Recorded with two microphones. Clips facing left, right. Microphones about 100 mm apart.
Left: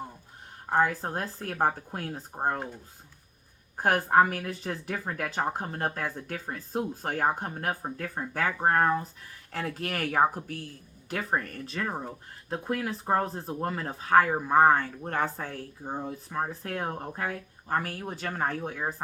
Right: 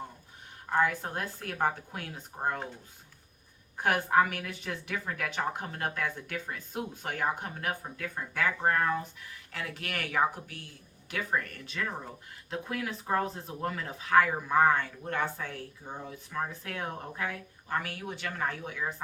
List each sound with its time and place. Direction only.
0.7 s speech: 35° left (ahead or behind)
3.8 s speech: 40° left (ahead or behind)